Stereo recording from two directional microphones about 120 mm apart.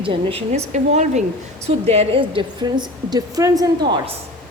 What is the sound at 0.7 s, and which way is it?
Speech, 75° right (ahead or behind).